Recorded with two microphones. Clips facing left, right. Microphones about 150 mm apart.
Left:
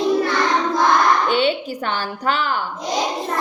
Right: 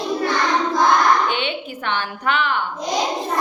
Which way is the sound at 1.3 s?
35° left (ahead or behind).